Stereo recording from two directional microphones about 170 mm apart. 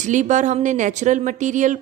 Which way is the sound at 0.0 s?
45° right (ahead or behind).